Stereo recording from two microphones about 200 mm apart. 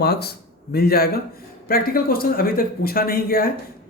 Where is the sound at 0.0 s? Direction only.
55° left (ahead or behind).